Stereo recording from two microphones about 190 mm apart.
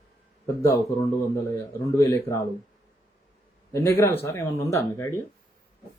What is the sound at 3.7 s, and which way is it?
Speech, 15° left (ahead or behind).